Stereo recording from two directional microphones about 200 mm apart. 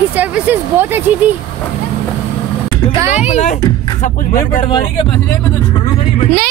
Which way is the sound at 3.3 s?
35° left (ahead or behind).